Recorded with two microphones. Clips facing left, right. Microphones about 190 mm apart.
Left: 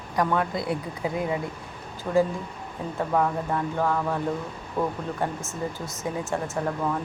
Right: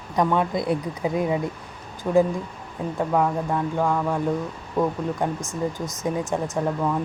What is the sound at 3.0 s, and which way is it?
Speech, 5° right (ahead or behind).